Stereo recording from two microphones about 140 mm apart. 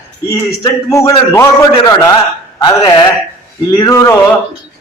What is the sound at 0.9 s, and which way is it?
A man's voice, 20° left (ahead or behind).